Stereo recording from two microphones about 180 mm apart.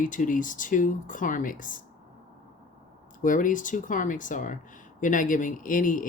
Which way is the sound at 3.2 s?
45° left (ahead or behind).